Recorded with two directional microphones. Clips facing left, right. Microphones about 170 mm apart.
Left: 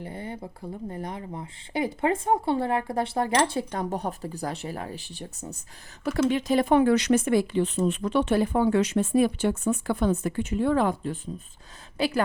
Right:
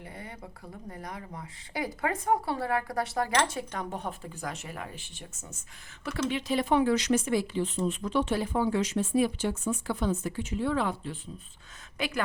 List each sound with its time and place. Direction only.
0.0 s speech: 30° left (ahead or behind)
6.1 s speech: 45° left (ahead or behind)
11.9 s speech: 35° left (ahead or behind)